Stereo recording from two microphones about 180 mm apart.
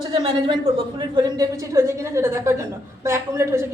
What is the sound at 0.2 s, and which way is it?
A woman's voice, 25° right (ahead or behind).